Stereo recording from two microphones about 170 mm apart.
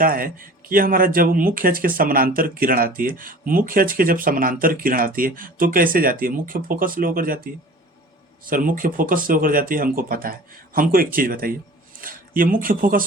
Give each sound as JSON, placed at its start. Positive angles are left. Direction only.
{"t": 0.0, "sound": "speech", "side_deg": -55}